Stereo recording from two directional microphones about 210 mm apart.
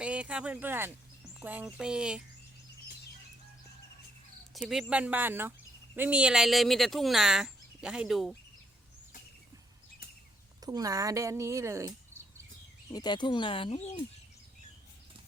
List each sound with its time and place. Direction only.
0.0 s speech: 5° right (ahead or behind)
4.5 s speech: centre (ahead or behind)
10.6 s speech: 15° right (ahead or behind)
12.9 s speech: 20° left (ahead or behind)